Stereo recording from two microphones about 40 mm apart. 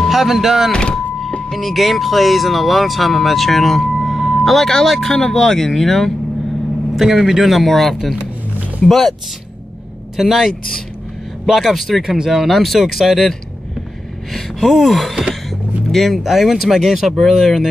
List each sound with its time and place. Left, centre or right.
0.1 s speech: centre
0.7 s speech: left
1.5 s speech: centre
7.0 s speech: centre
10.1 s speech: centre
12.0 s speech: centre
12.3 s speech: centre
14.3 s speech: centre
16.2 s speech: centre